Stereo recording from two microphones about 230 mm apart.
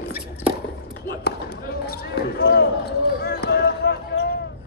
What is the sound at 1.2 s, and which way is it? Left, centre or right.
Basketball bounce, left.